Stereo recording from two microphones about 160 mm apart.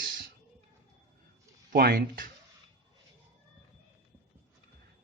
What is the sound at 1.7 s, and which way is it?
Speech, 70° right (ahead or behind).